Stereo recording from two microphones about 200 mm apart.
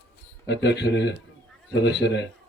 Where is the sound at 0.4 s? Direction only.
60° left (ahead or behind).